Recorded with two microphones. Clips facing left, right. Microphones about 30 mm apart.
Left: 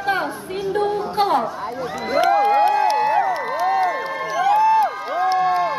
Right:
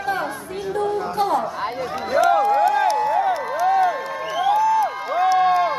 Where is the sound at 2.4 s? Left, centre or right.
Left.